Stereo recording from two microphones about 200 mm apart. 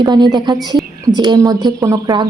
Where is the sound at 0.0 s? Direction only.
20° right (ahead or behind).